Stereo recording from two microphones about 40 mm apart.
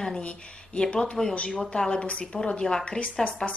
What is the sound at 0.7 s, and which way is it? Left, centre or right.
A woman's voice, centre.